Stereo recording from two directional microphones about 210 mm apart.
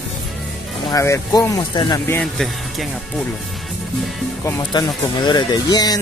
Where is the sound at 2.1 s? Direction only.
Centre (ahead or behind).